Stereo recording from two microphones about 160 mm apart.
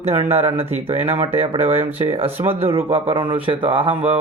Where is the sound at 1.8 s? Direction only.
35° right (ahead or behind).